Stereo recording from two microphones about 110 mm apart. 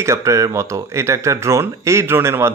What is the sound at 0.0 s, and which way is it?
Speech, 25° right (ahead or behind).